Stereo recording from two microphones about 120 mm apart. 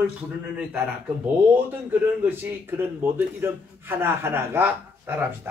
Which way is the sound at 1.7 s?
15° right (ahead or behind).